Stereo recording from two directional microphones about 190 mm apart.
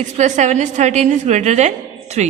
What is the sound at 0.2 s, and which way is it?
A woman's voice, 40° right (ahead or behind).